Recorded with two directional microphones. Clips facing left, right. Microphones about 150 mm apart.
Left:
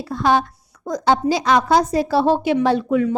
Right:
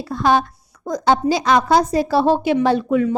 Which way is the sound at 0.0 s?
35° right (ahead or behind).